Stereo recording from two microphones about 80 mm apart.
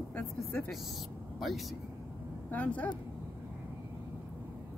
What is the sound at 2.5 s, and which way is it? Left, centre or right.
Speech, centre.